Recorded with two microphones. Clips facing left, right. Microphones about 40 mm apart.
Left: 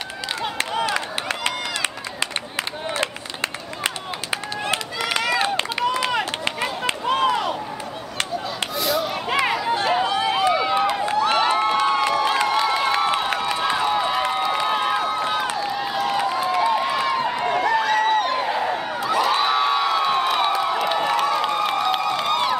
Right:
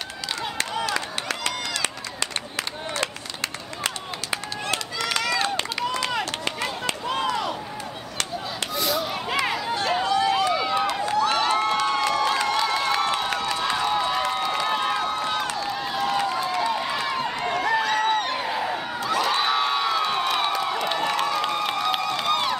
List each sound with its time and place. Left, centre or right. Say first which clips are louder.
0.4 s run: left 4 dB; left
3.8 s run: left 3 dB; left
8.7 s a sound: left 2 dB; centre
9.3 s run: left 5 dB; left
10.0 s run: left 1 dB; left
10.8 s run: left 3 dB; centre
11.1 s crowd: left 1 dB; left
11.5 s crowd: left 3 dB; centre